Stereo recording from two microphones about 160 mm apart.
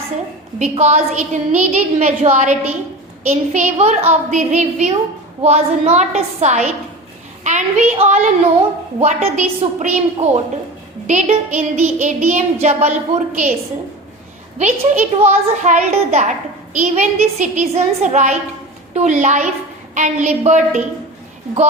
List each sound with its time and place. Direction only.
0.6 s a woman's voice: 45° right (ahead or behind)
14.6 s a woman's voice: 45° right (ahead or behind)